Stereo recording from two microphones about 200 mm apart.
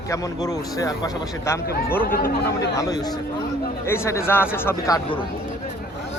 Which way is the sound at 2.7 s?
15° left (ahead or behind).